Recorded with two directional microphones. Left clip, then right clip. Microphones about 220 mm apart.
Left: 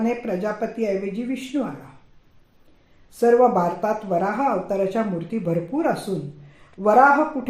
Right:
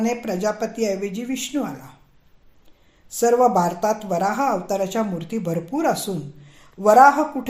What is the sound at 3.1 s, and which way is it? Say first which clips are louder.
Speech: even; 35° right (ahead or behind).